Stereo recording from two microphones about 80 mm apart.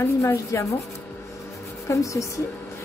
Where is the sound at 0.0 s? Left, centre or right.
Left.